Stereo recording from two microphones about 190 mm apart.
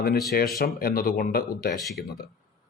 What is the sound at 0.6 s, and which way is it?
Speech, 50° left (ahead or behind).